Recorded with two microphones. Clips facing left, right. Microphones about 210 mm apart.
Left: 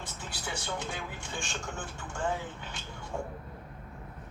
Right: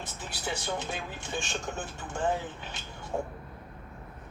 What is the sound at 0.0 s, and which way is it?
Speech, 20° right (ahead or behind).